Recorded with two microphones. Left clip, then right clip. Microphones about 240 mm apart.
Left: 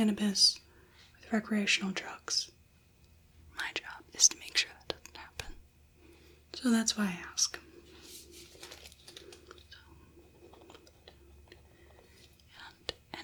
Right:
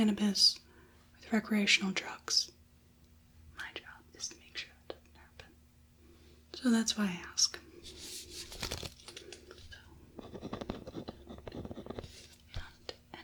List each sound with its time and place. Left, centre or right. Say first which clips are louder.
0.0 s speech: left 1 dB; centre
3.5 s whispering: left 7 dB; centre
6.5 s speech: left 1 dB; centre
12.8 s whispering: left 8 dB; centre